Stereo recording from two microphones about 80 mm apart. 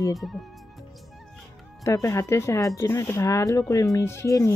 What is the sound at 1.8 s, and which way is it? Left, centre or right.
Speech, left.